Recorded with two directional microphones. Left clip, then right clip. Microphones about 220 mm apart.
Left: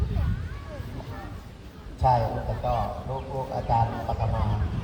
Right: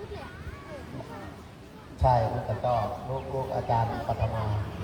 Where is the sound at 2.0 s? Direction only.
25° left (ahead or behind).